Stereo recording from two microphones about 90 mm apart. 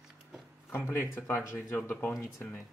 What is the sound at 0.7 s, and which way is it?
Speech, 25° left (ahead or behind).